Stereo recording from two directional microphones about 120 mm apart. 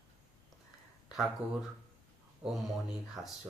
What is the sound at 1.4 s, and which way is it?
Speech, 10° right (ahead or behind).